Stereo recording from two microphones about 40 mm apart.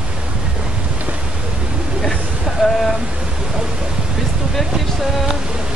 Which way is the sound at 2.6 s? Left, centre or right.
Centre.